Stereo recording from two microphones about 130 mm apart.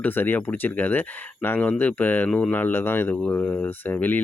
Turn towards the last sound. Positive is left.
turn(degrees=15)  # may be behind; listen again after turning